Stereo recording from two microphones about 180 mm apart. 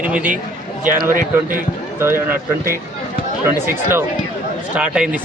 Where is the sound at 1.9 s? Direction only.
15° right (ahead or behind).